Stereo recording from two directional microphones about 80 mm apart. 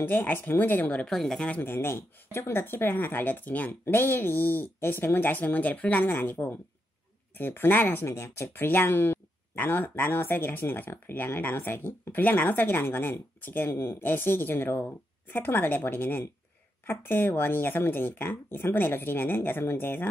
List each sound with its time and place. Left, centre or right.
0.0 s speech: left
1.0 s a woman's voice: centre
1.5 s speech: left